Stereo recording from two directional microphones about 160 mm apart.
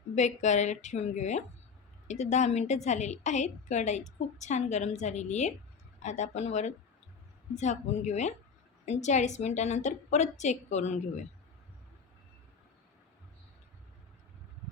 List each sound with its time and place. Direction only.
0.2 s a woman's voice: 45° left (ahead or behind)